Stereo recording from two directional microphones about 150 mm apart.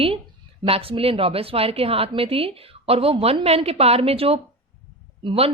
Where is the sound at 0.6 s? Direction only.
40° right (ahead or behind).